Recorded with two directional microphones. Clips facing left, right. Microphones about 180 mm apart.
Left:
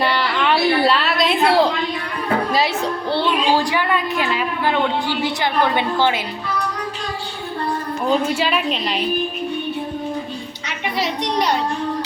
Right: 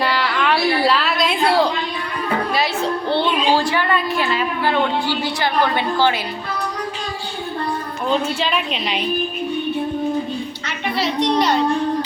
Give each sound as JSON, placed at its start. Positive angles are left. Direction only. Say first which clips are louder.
{"t": 0.0, "sound": "a sound", "louder": "even", "side_deg": 0}
{"t": 0.8, "sound": "a woman's voice", "louder": "left 1 dB", "side_deg": 0}
{"t": 3.1, "sound": "a woman's voice", "louder": "even", "side_deg": 10}
{"t": 8.3, "sound": "a woman's voice", "louder": "left 2 dB", "side_deg": 5}
{"t": 10.7, "sound": "a child's voice", "louder": "even", "side_deg": 15}